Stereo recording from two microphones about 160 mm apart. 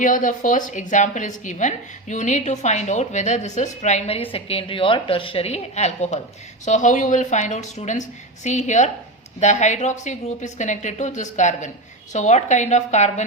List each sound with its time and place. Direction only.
0.0 s a woman's voice: 55° left (ahead or behind)